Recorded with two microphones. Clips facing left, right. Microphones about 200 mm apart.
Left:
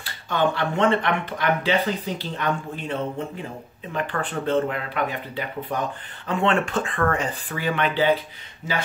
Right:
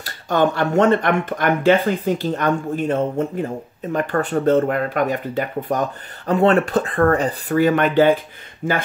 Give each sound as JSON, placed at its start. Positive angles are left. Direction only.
{"t": 0.0, "sound": "speech", "side_deg": -45}